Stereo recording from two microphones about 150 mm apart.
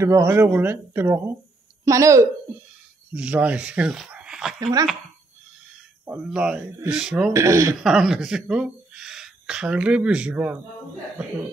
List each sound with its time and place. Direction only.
0.0 s speech: 20° right (ahead or behind)
3.1 s speech: 10° right (ahead or behind)
4.6 s speech: 25° right (ahead or behind)
6.0 s speech: 5° right (ahead or behind)
7.3 s speech: 20° right (ahead or behind)
7.8 s speech: 5° right (ahead or behind)